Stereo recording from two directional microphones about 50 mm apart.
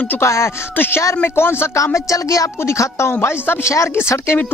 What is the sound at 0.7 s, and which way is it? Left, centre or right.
Speech, left.